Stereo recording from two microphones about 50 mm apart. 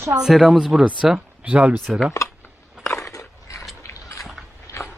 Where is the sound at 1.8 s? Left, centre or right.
Centre.